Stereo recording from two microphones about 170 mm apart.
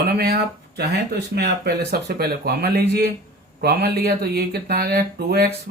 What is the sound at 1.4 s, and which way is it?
Speech, 75° right (ahead or behind).